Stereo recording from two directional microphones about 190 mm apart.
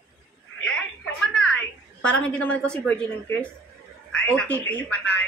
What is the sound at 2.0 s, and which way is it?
A woman's voice, 5° left (ahead or behind).